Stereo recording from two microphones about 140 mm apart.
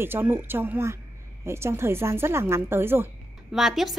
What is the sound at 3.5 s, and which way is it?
Speech, centre (ahead or behind).